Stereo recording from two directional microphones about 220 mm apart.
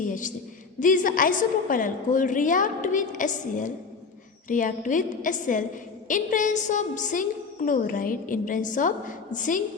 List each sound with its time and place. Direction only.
0.0 s a man's voice: 35° left (ahead or behind)